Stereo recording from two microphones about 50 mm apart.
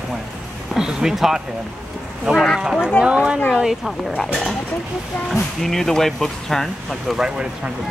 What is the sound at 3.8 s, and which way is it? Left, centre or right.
Speech, centre.